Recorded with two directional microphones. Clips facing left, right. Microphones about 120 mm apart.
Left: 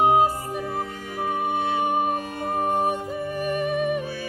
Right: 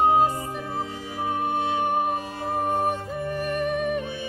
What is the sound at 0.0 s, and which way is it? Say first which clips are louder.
Music: left 1 dB; 10° left (ahead or behind).